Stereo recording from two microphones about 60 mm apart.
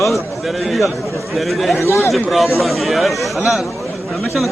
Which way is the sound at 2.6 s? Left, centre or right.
Centre.